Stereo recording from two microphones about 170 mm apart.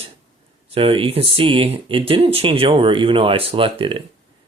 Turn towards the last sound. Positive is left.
turn(degrees=-30)  # may be behind; listen again after turning